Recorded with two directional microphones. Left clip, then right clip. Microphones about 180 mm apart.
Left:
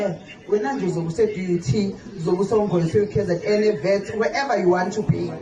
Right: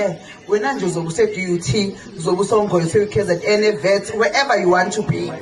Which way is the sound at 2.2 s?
40° left (ahead or behind).